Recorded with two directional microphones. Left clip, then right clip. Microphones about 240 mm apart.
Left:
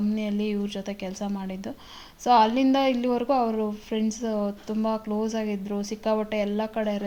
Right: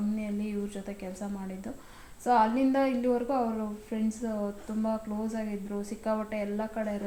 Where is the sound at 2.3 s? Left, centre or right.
Left.